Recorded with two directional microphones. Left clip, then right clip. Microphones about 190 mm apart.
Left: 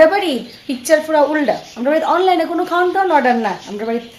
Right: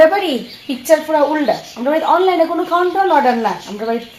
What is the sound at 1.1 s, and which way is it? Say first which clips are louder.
Speech: even; 20° left (ahead or behind).